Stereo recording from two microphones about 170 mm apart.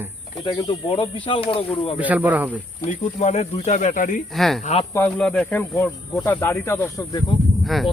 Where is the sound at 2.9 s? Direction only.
45° left (ahead or behind).